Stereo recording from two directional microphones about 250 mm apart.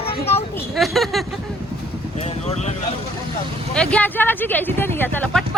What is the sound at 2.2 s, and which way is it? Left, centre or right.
Speech, left.